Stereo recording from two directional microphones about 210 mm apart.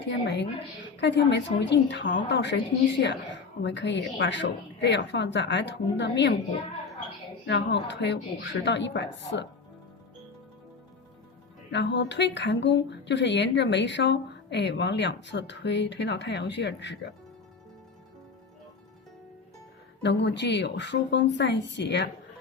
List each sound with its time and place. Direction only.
0.0 s speech: 55° left (ahead or behind)
7.4 s speech: 55° left (ahead or behind)
11.7 s speech: 55° left (ahead or behind)
20.0 s speech: 55° left (ahead or behind)